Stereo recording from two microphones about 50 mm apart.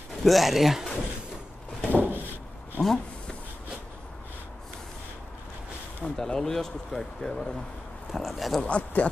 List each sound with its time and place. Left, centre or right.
0.2 s speech: centre
1.9 s a sound: right
2.8 s a sound: centre
6.0 s speech: centre
8.1 s speech: centre
8.6 s speech: left